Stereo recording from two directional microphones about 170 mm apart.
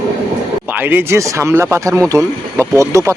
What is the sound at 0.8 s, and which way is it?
Speech, 15° right (ahead or behind).